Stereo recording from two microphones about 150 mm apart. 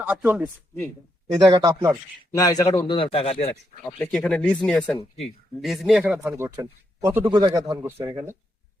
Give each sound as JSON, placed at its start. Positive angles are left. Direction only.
{"t": 0.1, "sound": "speech", "side_deg": -10}
{"t": 1.3, "sound": "a man's voice", "side_deg": -25}
{"t": 2.3, "sound": "speech", "side_deg": 25}
{"t": 2.6, "sound": "speech", "side_deg": 35}
{"t": 3.8, "sound": "speech", "side_deg": 5}
{"t": 6.2, "sound": "speech", "side_deg": -15}
{"t": 7.3, "sound": "a man's voice", "side_deg": -30}
{"t": 7.8, "sound": "speech", "side_deg": -15}